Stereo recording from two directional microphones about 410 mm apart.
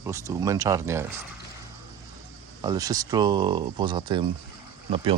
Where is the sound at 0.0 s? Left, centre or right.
Centre.